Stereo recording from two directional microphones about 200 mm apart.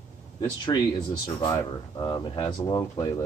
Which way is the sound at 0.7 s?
20° left (ahead or behind).